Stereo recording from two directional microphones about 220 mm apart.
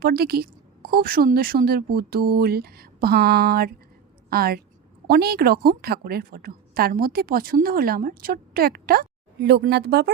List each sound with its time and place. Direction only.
0.0 s a woman's voice: 45° right (ahead or behind)